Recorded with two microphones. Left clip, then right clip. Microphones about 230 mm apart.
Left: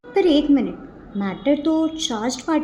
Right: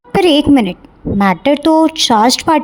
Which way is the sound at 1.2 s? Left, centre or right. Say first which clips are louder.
Right 9 dB; right.